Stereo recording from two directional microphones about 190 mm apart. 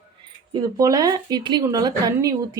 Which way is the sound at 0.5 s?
20° right (ahead or behind).